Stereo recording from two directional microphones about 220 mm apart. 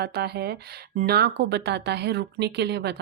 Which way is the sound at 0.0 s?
45° right (ahead or behind).